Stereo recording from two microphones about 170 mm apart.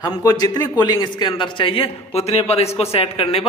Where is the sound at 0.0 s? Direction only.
20° left (ahead or behind).